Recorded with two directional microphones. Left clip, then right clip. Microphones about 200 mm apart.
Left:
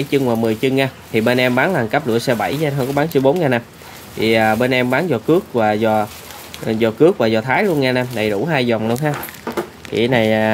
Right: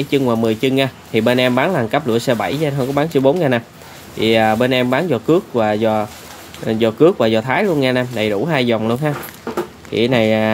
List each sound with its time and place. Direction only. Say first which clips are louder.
0.1 s speech: right 1 dB; 5° right (ahead or behind)